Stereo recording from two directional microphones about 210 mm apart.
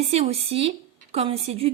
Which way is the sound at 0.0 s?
30° right (ahead or behind).